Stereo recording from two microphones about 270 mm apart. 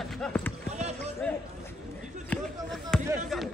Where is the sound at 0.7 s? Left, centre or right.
Right.